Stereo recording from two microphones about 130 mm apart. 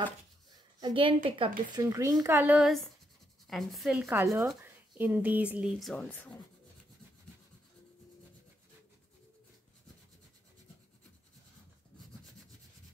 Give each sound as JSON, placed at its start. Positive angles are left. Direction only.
{"t": 0.7, "sound": "a woman's voice", "side_deg": -35}
{"t": 1.8, "sound": "speech", "side_deg": -25}
{"t": 3.4, "sound": "a woman's voice", "side_deg": 0}
{"t": 4.2, "sound": "speech", "side_deg": -25}
{"t": 6.0, "sound": "speech", "side_deg": 10}